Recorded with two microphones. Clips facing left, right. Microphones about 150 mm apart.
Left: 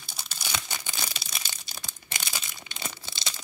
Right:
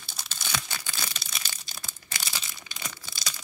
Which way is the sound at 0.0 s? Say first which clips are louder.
Even; 5° left (ahead or behind).